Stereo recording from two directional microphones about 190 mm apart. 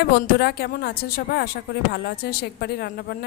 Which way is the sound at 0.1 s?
55° left (ahead or behind).